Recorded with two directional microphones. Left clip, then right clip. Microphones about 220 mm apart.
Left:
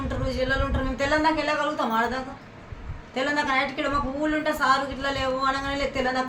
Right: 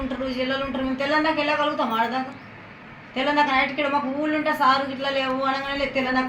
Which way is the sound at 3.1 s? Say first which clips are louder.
Right 4 dB; 20° left (ahead or behind).